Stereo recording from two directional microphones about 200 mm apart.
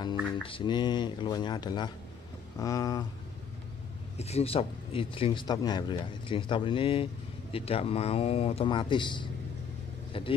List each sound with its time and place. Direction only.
0.4 s speech: 25° left (ahead or behind)
4.2 s speech: 30° left (ahead or behind)